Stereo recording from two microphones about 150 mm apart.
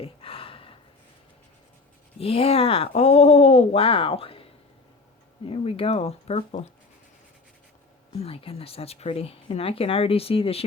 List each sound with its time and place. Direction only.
0.0 s a sound: 40° left (ahead or behind)
2.2 s speech: 40° left (ahead or behind)
5.5 s speech: 40° left (ahead or behind)
8.2 s speech: 40° left (ahead or behind)